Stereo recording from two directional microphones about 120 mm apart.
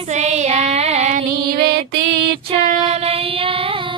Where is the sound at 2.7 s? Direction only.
65° right (ahead or behind); by 3.9 s 50° right (ahead or behind).